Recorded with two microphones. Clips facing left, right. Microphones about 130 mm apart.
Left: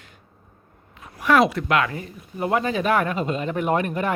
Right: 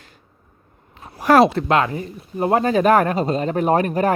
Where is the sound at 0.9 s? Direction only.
35° right (ahead or behind).